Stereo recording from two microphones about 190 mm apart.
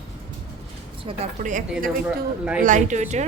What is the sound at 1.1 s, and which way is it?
Speech, 30° right (ahead or behind).